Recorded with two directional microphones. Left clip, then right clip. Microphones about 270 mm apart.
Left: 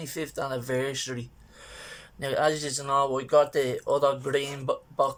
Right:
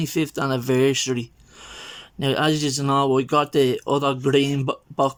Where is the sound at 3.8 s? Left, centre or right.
Right.